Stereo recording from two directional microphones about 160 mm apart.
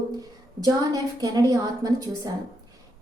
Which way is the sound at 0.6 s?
25° right (ahead or behind).